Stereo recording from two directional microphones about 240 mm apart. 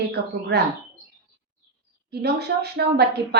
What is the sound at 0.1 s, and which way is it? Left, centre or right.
Speech, right.